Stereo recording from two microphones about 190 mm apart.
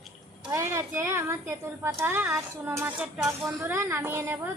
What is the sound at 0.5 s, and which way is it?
A woman's voice, 15° right (ahead or behind).